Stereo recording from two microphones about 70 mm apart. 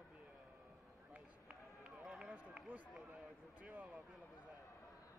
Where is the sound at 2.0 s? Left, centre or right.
Centre.